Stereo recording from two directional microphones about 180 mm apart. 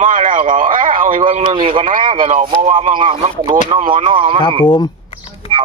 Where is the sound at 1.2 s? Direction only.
30° right (ahead or behind).